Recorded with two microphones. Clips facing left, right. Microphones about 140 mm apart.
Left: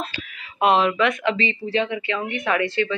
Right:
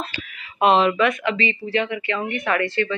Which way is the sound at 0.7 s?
10° left (ahead or behind).